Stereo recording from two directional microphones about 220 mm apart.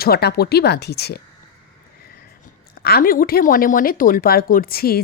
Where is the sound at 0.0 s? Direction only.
45° left (ahead or behind).